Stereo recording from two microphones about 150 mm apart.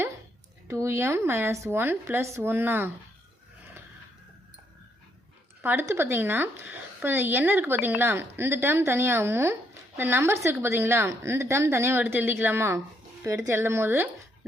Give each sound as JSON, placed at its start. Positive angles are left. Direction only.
{"t": 0.7, "sound": "speech", "side_deg": -20}
{"t": 5.6, "sound": "speech", "side_deg": -15}